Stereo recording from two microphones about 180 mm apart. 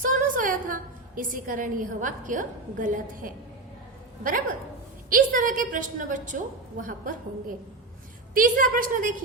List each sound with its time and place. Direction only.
0.0 s a woman's voice: 50° right (ahead or behind)
8.3 s a woman's voice: 50° right (ahead or behind)